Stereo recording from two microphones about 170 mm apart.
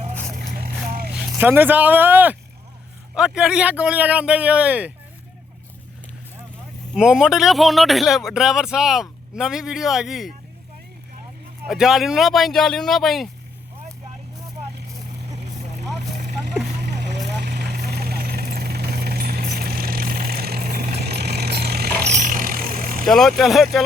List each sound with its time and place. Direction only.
0.3 s vehicle: 60° right (ahead or behind)
1.1 s a man's voice: 10° right (ahead or behind)
6.9 s speech: 5° right (ahead or behind)
11.7 s speech: centre (ahead or behind)
16.8 s vehicle: 90° right; by 22.1 s 70° right (ahead or behind)
22.1 s vehicle: 50° right (ahead or behind)
23.0 s speech: centre (ahead or behind)